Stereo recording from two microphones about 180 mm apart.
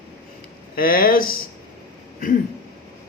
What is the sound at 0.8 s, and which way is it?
Speech, 55° left (ahead or behind).